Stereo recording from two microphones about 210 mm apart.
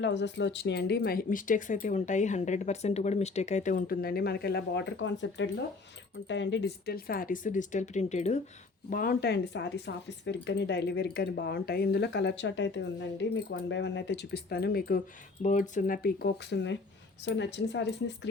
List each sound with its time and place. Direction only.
0.0 s speech: 55° left (ahead or behind); by 8.4 s 35° left (ahead or behind)
8.9 s speech: 45° left (ahead or behind)
15.4 s speech: 35° left (ahead or behind); by 18.3 s 55° left (ahead or behind)